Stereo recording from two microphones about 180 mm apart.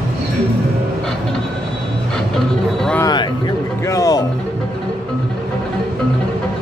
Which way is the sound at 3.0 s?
25° left (ahead or behind).